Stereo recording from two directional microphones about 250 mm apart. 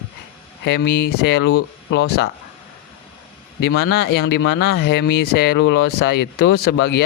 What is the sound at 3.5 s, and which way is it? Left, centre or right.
Speech, left.